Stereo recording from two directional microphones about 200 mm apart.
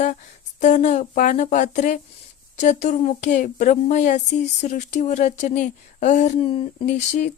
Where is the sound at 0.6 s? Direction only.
35° left (ahead or behind).